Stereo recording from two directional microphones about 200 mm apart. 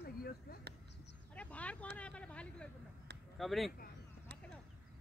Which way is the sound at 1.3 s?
5° left (ahead or behind).